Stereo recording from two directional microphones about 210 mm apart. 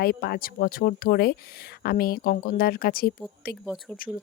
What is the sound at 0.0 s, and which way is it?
Speech, 50° left (ahead or behind).